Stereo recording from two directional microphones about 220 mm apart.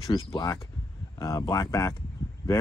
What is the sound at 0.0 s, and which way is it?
Speech, 15° left (ahead or behind).